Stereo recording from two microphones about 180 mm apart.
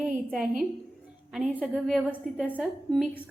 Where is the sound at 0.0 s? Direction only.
5° right (ahead or behind).